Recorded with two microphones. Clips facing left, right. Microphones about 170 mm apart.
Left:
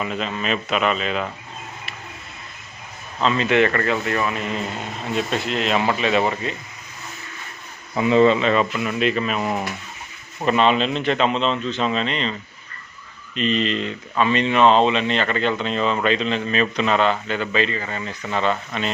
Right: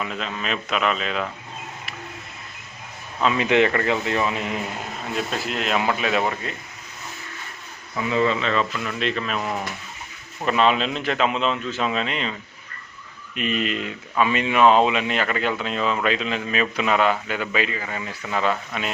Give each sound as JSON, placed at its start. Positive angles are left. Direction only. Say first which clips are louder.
{"t": 0.0, "sound": "a man's voice", "louder": "left 3 dB", "side_deg": 0}
{"t": 3.2, "sound": "speech", "louder": "left 1 dB", "side_deg": -10}
{"t": 5.1, "sound": "a man's voice", "louder": "left 4 dB", "side_deg": 0}
{"t": 7.9, "sound": "speech", "louder": "left 6 dB", "side_deg": 25}
{"t": 10.4, "sound": "a man's voice", "louder": "left 2 dB", "side_deg": 0}